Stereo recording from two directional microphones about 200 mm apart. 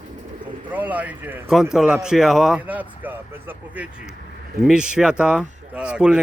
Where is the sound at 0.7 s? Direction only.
10° right (ahead or behind).